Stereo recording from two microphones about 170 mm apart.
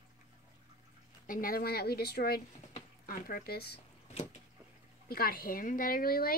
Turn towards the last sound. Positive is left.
turn(degrees=60)  # may be behind; listen again after turning